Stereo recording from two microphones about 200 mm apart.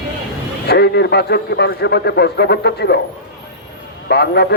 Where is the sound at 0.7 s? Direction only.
55° left (ahead or behind).